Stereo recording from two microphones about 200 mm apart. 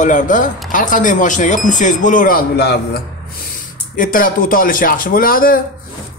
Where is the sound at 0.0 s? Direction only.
40° left (ahead or behind).